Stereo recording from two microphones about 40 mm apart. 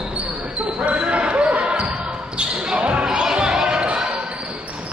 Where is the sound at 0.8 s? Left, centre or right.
Right.